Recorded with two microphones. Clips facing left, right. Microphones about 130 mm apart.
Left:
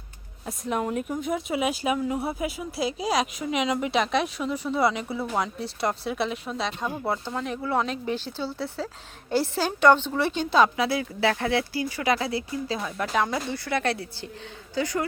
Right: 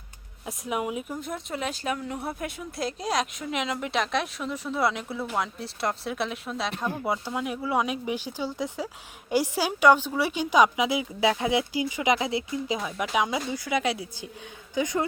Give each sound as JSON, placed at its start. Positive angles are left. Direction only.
{"t": 0.4, "sound": "speech", "side_deg": -10}
{"t": 7.1, "sound": "a woman's voice", "side_deg": -10}